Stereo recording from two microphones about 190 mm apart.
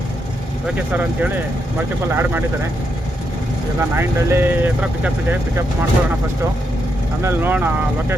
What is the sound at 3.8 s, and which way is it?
Speech, 10° right (ahead or behind).